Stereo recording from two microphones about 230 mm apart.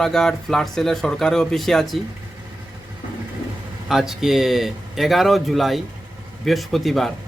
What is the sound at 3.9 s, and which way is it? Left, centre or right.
Speech, centre.